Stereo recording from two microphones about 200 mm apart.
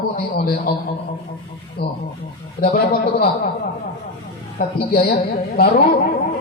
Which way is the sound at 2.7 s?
50° left (ahead or behind).